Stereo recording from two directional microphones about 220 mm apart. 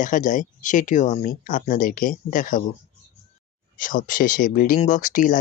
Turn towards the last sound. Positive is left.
turn(degrees=35)  # may be behind; listen again after turning